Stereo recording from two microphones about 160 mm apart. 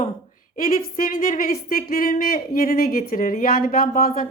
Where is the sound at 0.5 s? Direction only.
60° left (ahead or behind).